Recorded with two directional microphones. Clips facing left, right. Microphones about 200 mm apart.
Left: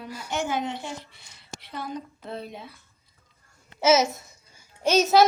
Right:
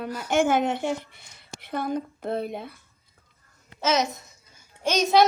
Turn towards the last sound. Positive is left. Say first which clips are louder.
# left 1 dB
turn(degrees=5)  # may be behind; listen again after turning